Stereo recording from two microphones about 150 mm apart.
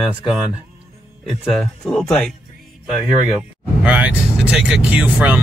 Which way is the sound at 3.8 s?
10° right (ahead or behind).